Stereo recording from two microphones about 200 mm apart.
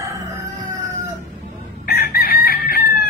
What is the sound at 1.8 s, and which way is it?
Chicken, 50° left (ahead or behind).